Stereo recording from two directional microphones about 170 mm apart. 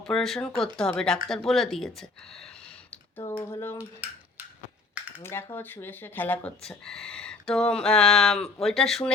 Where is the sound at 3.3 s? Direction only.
15° left (ahead or behind).